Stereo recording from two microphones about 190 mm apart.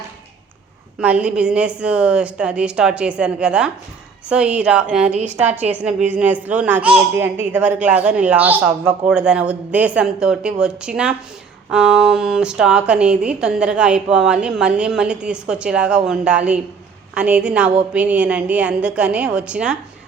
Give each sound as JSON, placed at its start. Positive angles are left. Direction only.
{"t": 0.9, "sound": "speech", "side_deg": -5}
{"t": 5.1, "sound": "a woman's voice", "side_deg": -35}
{"t": 5.7, "sound": "speech", "side_deg": -5}